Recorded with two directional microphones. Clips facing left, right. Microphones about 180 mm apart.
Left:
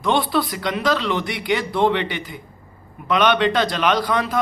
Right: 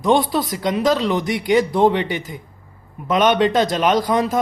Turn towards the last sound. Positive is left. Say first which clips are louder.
# right 3 dB
turn(degrees=-45)  # may be behind; listen again after turning